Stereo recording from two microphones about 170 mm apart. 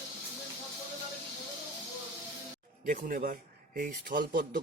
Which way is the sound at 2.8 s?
55° right (ahead or behind).